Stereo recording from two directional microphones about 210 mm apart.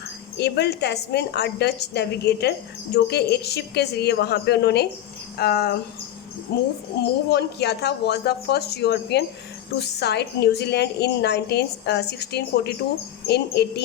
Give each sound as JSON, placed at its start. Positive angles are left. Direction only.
{"t": 0.3, "sound": "a woman's voice", "side_deg": 50}
{"t": 7.0, "sound": "a woman's voice", "side_deg": 50}